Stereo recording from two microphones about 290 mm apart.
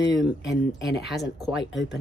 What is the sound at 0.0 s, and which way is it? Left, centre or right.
Speech, left.